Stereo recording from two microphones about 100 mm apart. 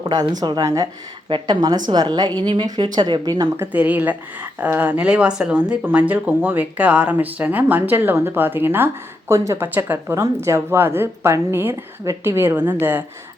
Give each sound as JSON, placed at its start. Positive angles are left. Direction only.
{"t": 0.0, "sound": "a woman's voice", "side_deg": -45}
{"t": 3.6, "sound": "speech", "side_deg": -15}